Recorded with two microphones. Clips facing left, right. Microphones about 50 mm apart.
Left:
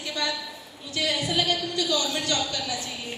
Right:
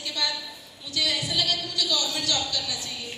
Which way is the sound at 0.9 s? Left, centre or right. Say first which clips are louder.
Left 2 dB; left.